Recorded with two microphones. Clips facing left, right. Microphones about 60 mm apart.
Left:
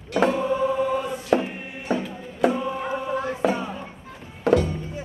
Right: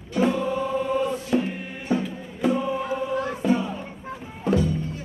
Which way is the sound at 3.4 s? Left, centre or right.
Left.